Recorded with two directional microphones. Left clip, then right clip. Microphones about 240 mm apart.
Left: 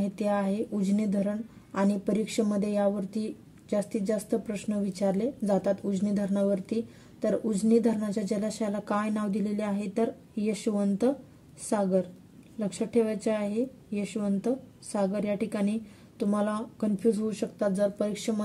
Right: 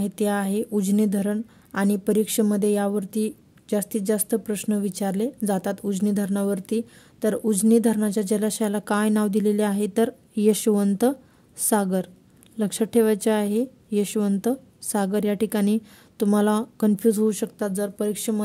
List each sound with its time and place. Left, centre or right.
0.0 s speech: right